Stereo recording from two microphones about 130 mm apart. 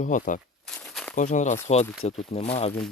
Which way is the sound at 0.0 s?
85° left.